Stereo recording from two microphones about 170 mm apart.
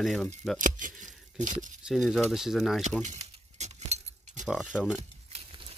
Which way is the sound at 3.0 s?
40° right (ahead or behind).